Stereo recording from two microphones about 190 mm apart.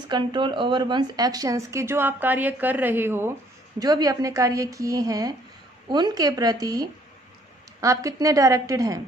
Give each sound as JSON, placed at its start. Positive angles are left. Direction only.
{"t": 0.1, "sound": "a woman's voice", "side_deg": -25}